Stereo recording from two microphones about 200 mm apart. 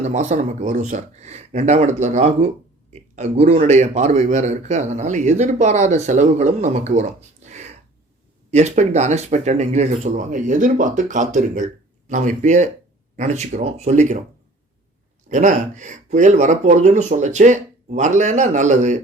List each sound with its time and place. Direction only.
0.0 s a man's voice: 35° right (ahead or behind)
15.3 s a man's voice: 40° right (ahead or behind)